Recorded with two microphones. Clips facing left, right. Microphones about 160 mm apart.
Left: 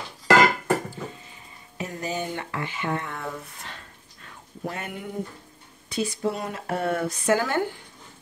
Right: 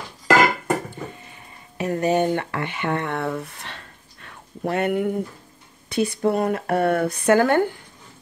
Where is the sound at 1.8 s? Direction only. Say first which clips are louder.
Right 10 dB; 65° right (ahead or behind).